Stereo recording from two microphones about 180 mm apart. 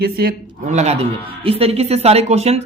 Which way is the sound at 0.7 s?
40° right (ahead or behind).